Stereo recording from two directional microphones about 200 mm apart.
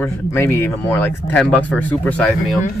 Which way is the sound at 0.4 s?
10° left (ahead or behind).